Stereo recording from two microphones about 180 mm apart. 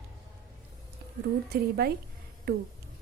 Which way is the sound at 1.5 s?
60° right (ahead or behind).